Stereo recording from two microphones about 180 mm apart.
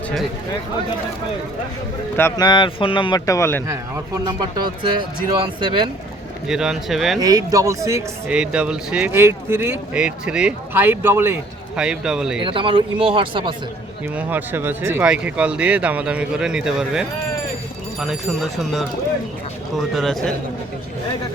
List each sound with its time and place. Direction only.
2.1 s speech: 15° left (ahead or behind)
3.7 s speech: 20° right (ahead or behind)
6.5 s speech: 5° right (ahead or behind)
7.2 s speech: 20° right (ahead or behind)
8.4 s speech: 5° right (ahead or behind)
12.4 s speech: 30° right (ahead or behind)
14.2 s speech: 10° right (ahead or behind)
19.9 s speech: centre (ahead or behind)